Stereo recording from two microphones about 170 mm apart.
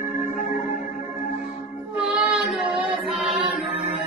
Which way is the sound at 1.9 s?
5° right (ahead or behind).